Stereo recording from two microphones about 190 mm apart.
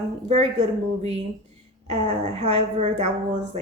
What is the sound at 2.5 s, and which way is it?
Speech, 35° right (ahead or behind).